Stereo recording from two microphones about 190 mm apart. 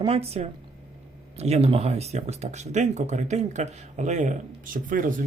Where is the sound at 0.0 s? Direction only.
30° right (ahead or behind).